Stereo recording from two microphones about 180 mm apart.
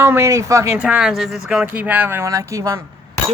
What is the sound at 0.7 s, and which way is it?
Speech, 5° right (ahead or behind).